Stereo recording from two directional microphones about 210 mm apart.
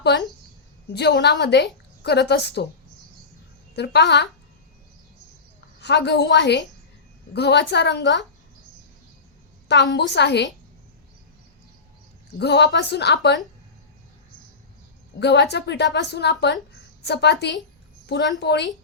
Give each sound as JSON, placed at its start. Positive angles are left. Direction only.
{"t": 0.9, "sound": "a woman's voice", "side_deg": 55}
{"t": 3.8, "sound": "a woman's voice", "side_deg": 55}
{"t": 5.8, "sound": "a woman's voice", "side_deg": 55}
{"t": 9.6, "sound": "a woman's voice", "side_deg": 55}
{"t": 12.4, "sound": "a woman's voice", "side_deg": 55}
{"t": 15.2, "sound": "a woman's voice", "side_deg": 55}